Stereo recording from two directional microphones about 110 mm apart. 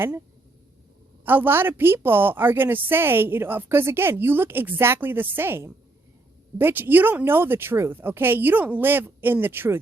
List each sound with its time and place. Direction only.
1.2 s a woman's voice: 20° right (ahead or behind)